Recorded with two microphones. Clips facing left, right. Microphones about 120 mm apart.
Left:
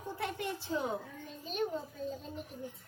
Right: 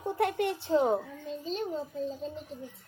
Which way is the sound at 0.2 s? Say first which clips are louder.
Right 10 dB; 65° right (ahead or behind).